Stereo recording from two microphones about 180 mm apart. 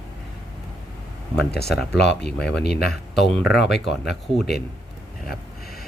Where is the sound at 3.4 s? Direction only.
65° left (ahead or behind).